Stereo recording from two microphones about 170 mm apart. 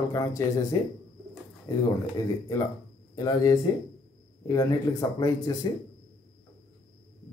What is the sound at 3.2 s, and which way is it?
Speech, 20° left (ahead or behind).